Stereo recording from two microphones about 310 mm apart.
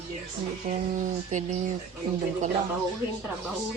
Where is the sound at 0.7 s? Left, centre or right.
Right.